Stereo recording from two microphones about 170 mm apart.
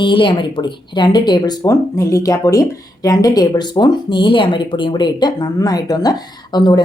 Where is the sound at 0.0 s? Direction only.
30° left (ahead or behind).